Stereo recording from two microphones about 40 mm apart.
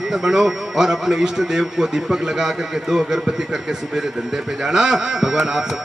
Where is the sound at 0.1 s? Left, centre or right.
Centre.